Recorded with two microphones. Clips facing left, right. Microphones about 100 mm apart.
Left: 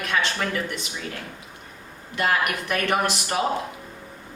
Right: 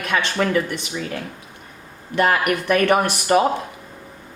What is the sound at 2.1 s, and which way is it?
Speech, 55° right (ahead or behind).